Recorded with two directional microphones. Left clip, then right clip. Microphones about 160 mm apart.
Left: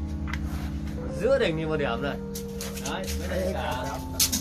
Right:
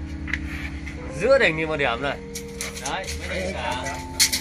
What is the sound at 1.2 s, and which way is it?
Speech, 45° right (ahead or behind).